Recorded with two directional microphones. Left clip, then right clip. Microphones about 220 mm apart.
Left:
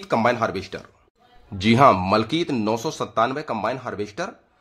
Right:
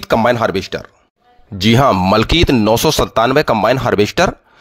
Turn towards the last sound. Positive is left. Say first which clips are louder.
# right 16 dB
turn(degrees=-40)  # may be behind; listen again after turning